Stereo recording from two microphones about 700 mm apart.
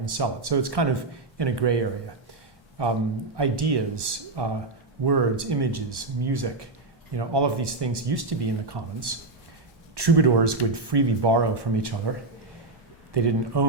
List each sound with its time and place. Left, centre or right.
0.0 s speech: right
13.1 s speech: right